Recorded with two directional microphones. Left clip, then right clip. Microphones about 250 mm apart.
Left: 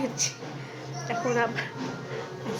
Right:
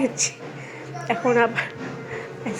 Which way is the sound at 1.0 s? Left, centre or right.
Right.